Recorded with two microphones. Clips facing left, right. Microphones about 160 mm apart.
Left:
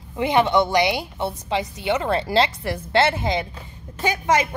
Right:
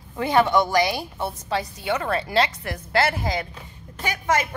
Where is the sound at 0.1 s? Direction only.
20° left (ahead or behind).